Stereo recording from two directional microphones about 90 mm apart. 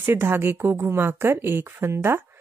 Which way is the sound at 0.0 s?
25° right (ahead or behind).